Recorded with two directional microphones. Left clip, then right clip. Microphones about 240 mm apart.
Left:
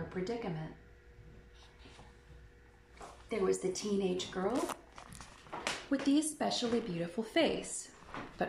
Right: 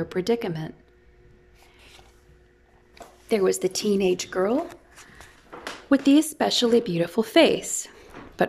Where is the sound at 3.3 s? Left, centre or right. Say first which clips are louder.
Right 11 dB; right.